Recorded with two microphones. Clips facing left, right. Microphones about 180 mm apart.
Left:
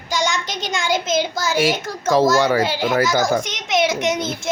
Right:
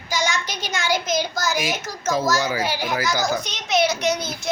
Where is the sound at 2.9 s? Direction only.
50° left (ahead or behind).